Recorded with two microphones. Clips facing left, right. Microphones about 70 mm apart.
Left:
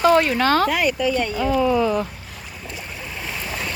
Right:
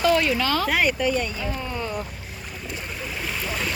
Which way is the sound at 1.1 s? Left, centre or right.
Left.